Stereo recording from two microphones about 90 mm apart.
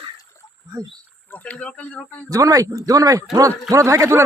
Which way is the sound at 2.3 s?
40° right (ahead or behind).